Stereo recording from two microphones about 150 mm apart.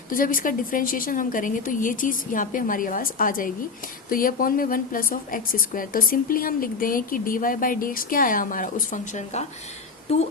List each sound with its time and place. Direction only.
0.1 s a woman's voice: 65° left (ahead or behind)
10.1 s speech: 45° left (ahead or behind)